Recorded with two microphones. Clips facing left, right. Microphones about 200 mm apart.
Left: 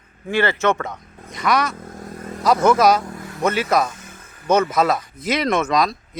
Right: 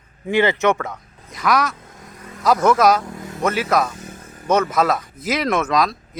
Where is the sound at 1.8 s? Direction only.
45° left (ahead or behind).